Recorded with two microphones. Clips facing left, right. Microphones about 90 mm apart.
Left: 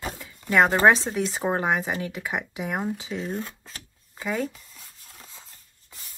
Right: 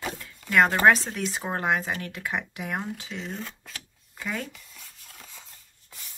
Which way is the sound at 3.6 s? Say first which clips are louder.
Right 1 dB; 30° left (ahead or behind).